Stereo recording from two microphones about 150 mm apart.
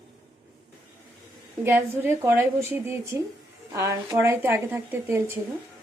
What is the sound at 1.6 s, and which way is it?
A woman's voice, 15° right (ahead or behind).